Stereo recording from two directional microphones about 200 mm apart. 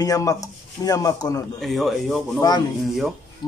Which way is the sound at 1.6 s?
Centre (ahead or behind).